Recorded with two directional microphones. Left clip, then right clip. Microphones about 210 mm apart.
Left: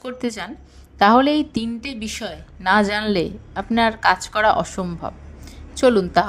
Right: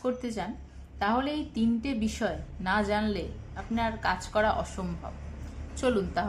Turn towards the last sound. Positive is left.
turn(degrees=30)  # may be behind; listen again after turning